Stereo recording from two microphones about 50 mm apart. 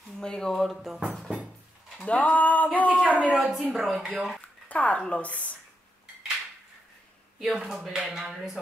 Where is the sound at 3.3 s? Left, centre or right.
Centre.